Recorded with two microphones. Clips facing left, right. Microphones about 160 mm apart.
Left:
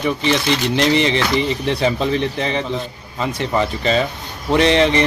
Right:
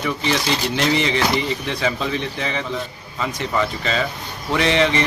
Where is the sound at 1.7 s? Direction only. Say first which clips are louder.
Left 5 dB; 30° left (ahead or behind).